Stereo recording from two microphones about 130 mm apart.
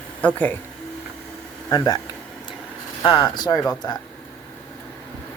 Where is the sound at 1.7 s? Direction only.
30° left (ahead or behind).